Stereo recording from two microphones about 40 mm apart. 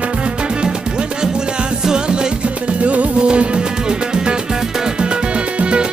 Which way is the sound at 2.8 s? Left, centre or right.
Right.